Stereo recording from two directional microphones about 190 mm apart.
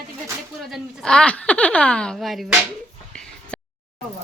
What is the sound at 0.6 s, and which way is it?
A woman's voice, centre (ahead or behind).